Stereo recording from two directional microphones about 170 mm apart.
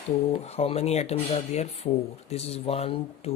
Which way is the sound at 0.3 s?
35° left (ahead or behind).